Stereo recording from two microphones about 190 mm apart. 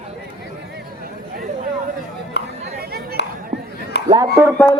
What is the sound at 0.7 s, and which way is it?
Chatter, 55° right (ahead or behind).